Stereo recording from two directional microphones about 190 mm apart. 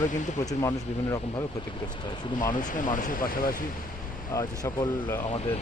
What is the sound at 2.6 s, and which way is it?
Speech, 45° left (ahead or behind).